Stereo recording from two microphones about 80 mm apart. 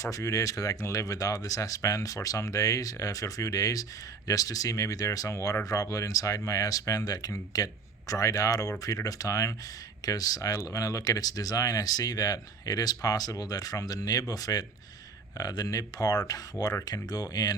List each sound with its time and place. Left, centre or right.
0.0 s speech: left